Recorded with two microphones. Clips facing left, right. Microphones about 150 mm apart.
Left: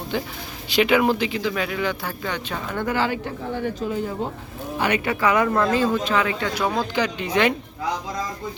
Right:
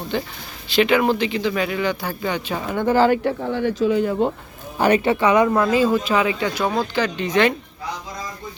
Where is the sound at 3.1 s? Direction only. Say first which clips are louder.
Right 7 dB; 75° right (ahead or behind).